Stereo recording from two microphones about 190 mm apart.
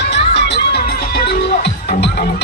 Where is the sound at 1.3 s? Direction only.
60° left (ahead or behind).